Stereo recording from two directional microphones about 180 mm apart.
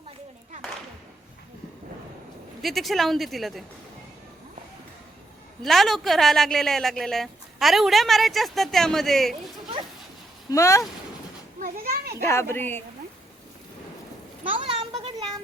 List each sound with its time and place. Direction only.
2.6 s a woman's voice: centre (ahead or behind)
5.6 s a woman's voice: centre (ahead or behind)
10.5 s a woman's voice: 15° left (ahead or behind)
11.6 s children playing: 55° right (ahead or behind)
12.3 s a woman's voice: 15° left (ahead or behind)
14.5 s a sound: 30° right (ahead or behind)